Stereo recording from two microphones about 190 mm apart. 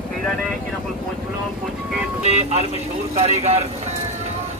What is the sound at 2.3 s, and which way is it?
Speech, 35° right (ahead or behind).